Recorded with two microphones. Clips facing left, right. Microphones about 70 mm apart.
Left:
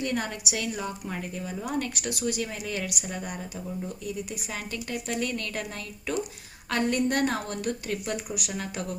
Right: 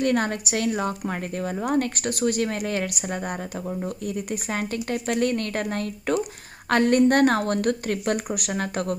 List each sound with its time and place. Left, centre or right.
0.0 s a woman's voice: right